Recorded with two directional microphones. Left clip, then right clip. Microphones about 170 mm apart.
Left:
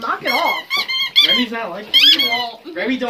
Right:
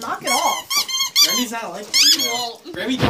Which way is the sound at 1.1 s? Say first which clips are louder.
Left 4 dB; 20° right (ahead or behind).